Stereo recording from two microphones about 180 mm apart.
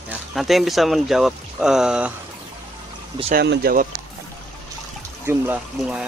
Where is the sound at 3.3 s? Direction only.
65° right (ahead or behind).